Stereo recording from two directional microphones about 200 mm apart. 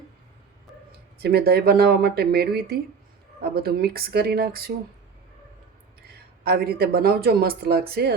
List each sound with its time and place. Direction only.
1.2 s speech: 50° right (ahead or behind)
6.0 s speech: 50° right (ahead or behind)